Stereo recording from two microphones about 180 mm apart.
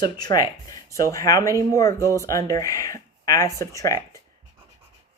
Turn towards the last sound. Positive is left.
turn(degrees=15)  # may be behind; listen again after turning